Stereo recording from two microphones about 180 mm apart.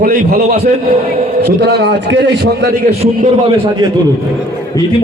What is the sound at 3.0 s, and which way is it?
Speech, 35° right (ahead or behind).